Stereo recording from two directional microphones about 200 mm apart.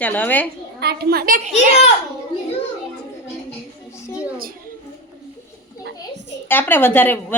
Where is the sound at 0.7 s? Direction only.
55° right (ahead or behind).